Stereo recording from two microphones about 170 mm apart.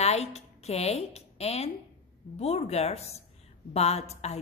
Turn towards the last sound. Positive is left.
turn(degrees=40)  # may be behind; listen again after turning